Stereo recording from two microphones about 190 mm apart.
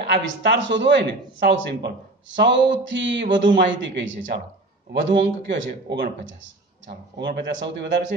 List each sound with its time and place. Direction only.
0.0 s a man's voice: 65° right (ahead or behind)